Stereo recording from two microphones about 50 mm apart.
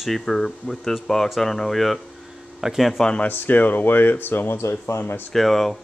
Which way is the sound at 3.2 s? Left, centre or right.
Left.